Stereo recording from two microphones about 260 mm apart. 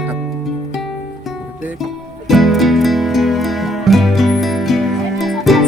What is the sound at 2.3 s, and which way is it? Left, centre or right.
Music, centre.